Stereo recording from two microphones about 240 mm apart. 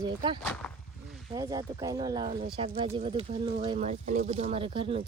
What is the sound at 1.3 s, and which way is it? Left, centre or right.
Speech, centre.